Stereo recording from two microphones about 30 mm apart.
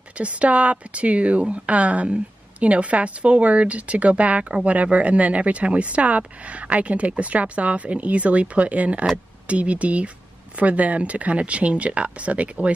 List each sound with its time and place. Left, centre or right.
0.2 s speech: right